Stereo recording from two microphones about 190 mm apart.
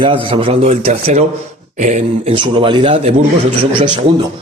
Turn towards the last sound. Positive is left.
turn(degrees=-25)  # may be behind; listen again after turning